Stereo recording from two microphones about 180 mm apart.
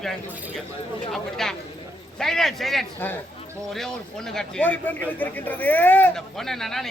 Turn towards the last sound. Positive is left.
turn(degrees=0)  # may be behind; listen again after turning